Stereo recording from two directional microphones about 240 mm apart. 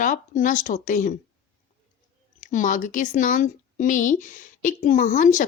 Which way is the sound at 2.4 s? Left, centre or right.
Left.